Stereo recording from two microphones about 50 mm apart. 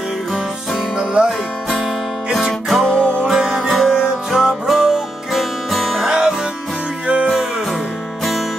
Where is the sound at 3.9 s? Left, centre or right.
Centre.